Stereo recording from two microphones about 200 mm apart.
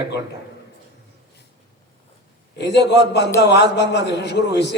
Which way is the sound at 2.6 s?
60° left (ahead or behind).